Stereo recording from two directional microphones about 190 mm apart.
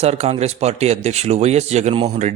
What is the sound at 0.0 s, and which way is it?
Speech, 35° right (ahead or behind).